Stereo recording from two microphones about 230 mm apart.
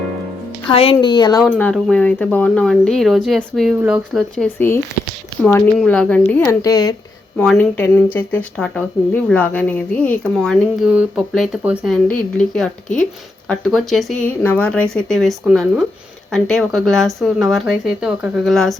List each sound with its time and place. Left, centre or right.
0.7 s a woman's voice: left
1.5 s speech: centre
7.3 s speech: centre